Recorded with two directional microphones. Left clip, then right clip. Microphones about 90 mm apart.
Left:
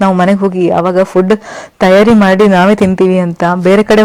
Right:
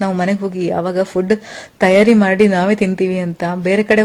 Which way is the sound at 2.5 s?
55° left (ahead or behind).